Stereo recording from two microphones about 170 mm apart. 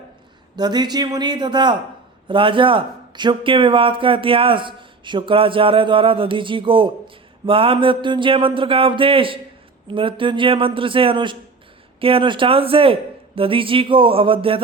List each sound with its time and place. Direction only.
0.5 s a man's voice: 25° right (ahead or behind)